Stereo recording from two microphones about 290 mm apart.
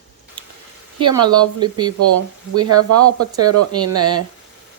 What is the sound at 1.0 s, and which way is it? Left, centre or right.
Speech, centre.